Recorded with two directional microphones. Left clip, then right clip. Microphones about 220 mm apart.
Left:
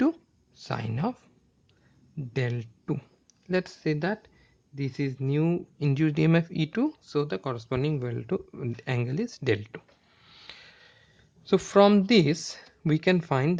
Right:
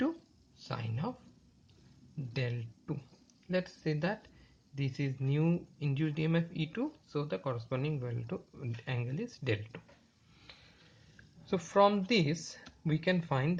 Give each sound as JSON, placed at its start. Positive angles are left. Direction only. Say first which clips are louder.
{"t": 0.5, "sound": "speech", "louder": "left 8 dB", "side_deg": 45}
{"t": 2.3, "sound": "speech", "louder": "left 7 dB", "side_deg": 45}
{"t": 10.3, "sound": "a sound", "louder": "left 10 dB", "side_deg": 45}
{"t": 11.4, "sound": "speech", "louder": "left 7 dB", "side_deg": 45}